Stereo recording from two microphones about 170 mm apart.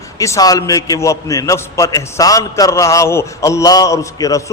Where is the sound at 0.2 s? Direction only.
20° left (ahead or behind).